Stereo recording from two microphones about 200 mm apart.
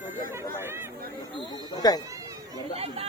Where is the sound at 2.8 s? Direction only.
30° right (ahead or behind).